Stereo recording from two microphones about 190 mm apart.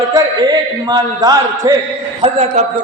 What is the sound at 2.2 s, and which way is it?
Speech, 35° right (ahead or behind).